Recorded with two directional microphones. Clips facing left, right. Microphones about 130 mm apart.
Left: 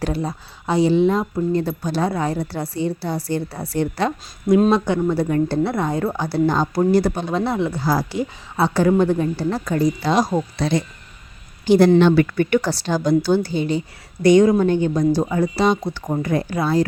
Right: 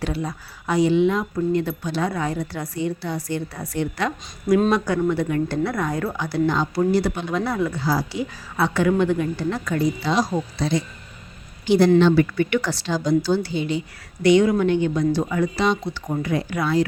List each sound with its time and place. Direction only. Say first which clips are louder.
0.0 s speech: left 3 dB; 35° left (ahead or behind)
7.8 s speech: left 2 dB; 50° left (ahead or behind)
8.5 s speech: left 3 dB; 35° left (ahead or behind); by 10.8 s 55° left (ahead or behind)
11.6 s speech: left 3 dB; 45° left (ahead or behind)
11.9 s speech: left 2 dB; 60° left (ahead or behind)
12.5 s speech: left 4 dB; 35° left (ahead or behind)
12.9 s speech: left 3 dB; 55° left (ahead or behind)
16.6 s speech: left 2 dB; 35° left (ahead or behind)